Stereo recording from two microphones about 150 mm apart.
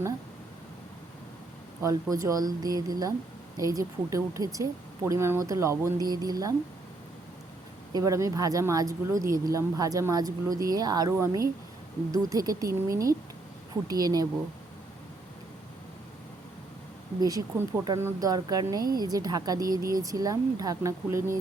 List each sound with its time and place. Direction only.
1.8 s speech: 20° right (ahead or behind)
7.9 s speech: 20° right (ahead or behind)
17.2 s speech: 25° right (ahead or behind)